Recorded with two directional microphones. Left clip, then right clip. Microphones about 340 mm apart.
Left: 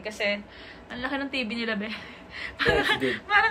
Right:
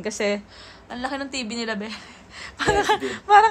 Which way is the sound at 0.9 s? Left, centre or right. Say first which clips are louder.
Right 1 dB; centre.